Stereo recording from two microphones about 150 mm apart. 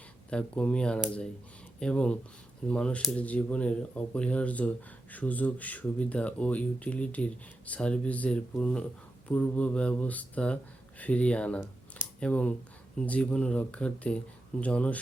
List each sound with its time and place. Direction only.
0.3 s speech: 5° left (ahead or behind)